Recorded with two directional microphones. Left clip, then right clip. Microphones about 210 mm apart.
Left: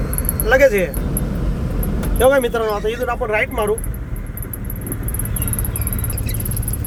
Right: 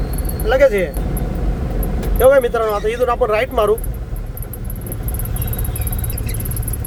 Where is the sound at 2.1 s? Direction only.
Centre (ahead or behind).